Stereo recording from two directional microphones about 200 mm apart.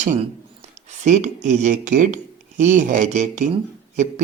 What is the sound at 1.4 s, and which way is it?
Speech, 35° right (ahead or behind).